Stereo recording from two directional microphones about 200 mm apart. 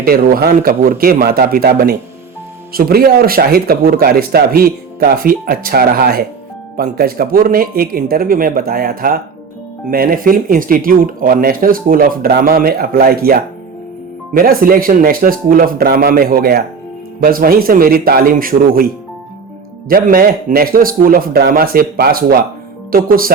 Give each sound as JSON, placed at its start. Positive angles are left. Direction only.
{"t": 0.0, "sound": "speech", "side_deg": -50}
{"t": 19.9, "sound": "speech", "side_deg": -45}